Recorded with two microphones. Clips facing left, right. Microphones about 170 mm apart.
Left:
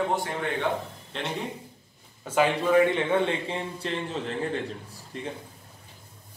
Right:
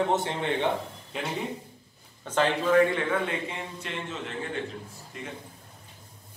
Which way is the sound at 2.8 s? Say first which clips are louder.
Left 3 dB; 25° left (ahead or behind).